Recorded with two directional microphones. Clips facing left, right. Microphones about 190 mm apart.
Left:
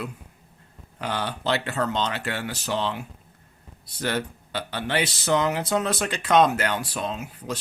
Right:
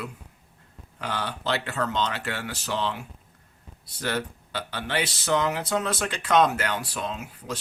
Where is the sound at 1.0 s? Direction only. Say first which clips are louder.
Left 2 dB; 20° left (ahead or behind).